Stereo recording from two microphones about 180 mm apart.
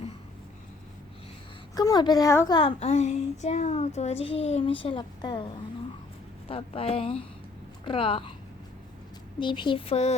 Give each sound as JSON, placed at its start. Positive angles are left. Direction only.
{"t": 1.7, "sound": "a woman's voice", "side_deg": 20}
{"t": 2.6, "sound": "a child's voice", "side_deg": 30}
{"t": 6.5, "sound": "a child's voice", "side_deg": 30}
{"t": 9.4, "sound": "a woman's voice", "side_deg": 25}